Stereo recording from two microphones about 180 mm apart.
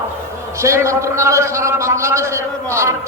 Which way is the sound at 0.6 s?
15° right (ahead or behind).